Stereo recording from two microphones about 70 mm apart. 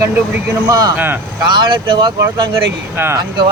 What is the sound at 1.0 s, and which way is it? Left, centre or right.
Speech, right.